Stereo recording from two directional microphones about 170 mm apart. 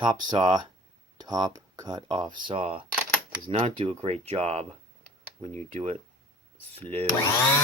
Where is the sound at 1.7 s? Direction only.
25° right (ahead or behind).